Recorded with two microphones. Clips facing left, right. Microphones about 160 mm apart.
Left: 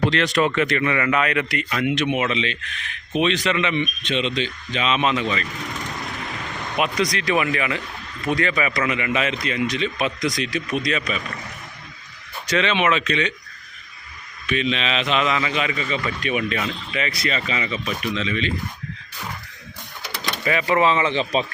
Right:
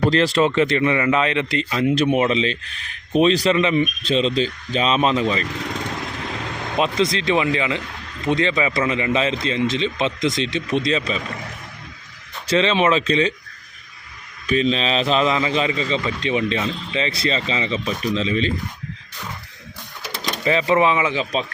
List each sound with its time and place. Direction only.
0.1 s speech: 30° right (ahead or behind)
6.7 s a man's voice: 25° right (ahead or behind)
12.5 s speech: 30° right (ahead or behind)
14.4 s a man's voice: 35° right (ahead or behind)
20.4 s speech: 25° right (ahead or behind); by 21.2 s 10° right (ahead or behind)